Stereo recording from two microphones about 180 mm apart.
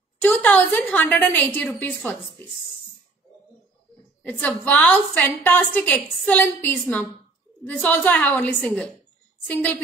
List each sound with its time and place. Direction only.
0.2 s a woman's voice: 10° left (ahead or behind)
4.3 s a woman's voice: 10° left (ahead or behind)